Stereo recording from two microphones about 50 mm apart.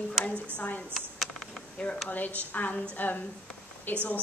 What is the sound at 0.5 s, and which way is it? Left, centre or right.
Speech, left.